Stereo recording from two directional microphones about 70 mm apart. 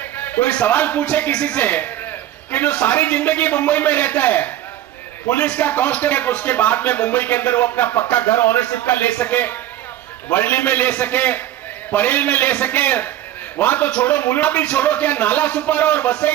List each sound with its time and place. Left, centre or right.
0.0 s speech: left